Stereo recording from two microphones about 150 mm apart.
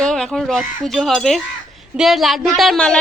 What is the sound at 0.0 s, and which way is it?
A woman's voice, 5° left (ahead or behind).